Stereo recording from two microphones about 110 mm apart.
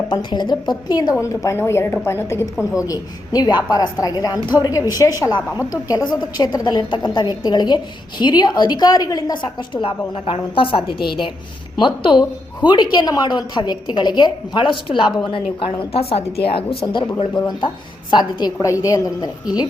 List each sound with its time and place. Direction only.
0.1 s a woman's voice: 40° left (ahead or behind)
1.5 s a woman's voice: 25° left (ahead or behind); by 16.7 s 60° left (ahead or behind)
16.8 s a woman's voice: 45° left (ahead or behind)
18.6 s a woman's voice: 30° left (ahead or behind)